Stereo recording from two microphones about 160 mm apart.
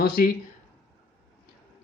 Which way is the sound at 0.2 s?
70° left (ahead or behind).